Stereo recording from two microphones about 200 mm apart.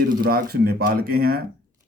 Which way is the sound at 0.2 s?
50° right (ahead or behind).